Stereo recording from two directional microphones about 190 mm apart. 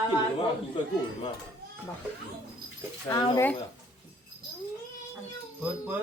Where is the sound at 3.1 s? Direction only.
20° left (ahead or behind).